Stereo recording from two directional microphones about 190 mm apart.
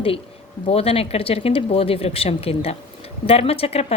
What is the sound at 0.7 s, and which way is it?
A woman's voice, 30° left (ahead or behind).